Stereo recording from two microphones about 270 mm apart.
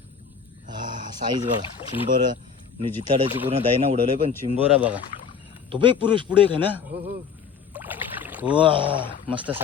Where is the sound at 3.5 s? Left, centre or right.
Right.